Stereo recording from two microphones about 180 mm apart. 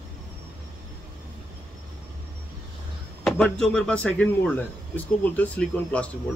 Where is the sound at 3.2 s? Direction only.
Centre (ahead or behind).